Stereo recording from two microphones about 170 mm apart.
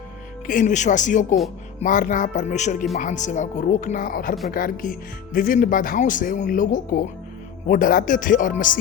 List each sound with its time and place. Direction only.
0.4 s speech: 50° left (ahead or behind)